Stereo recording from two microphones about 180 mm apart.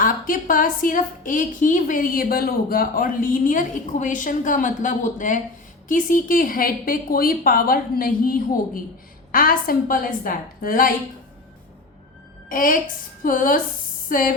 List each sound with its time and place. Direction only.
0.0 s a woman's voice: 50° left (ahead or behind)
12.5 s a woman's voice: 50° left (ahead or behind)